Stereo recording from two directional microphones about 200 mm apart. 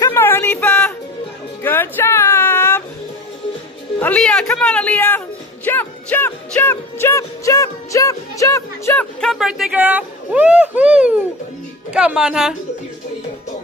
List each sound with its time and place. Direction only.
0.0 s a sound: 10° left (ahead or behind)
1.6 s music: 10° left (ahead or behind)
4.0 s speech: 5° left (ahead or behind)
5.7 s music: 10° left (ahead or behind)
9.2 s speech: centre (ahead or behind)